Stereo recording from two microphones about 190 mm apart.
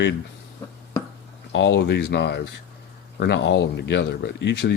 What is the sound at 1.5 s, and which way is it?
Speech, 70° left (ahead or behind).